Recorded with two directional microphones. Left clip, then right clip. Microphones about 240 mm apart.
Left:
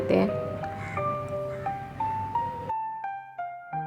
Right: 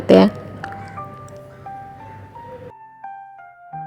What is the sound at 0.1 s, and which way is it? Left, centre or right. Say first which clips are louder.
Music: right 14 dB; right.